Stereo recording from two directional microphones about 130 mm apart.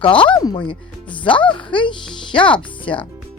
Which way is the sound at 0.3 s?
35° left (ahead or behind).